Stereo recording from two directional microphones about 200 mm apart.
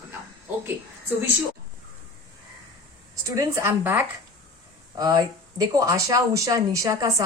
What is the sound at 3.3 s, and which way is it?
A woman's voice, 15° right (ahead or behind).